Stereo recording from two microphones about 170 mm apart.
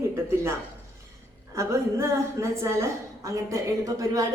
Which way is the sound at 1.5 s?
15° right (ahead or behind).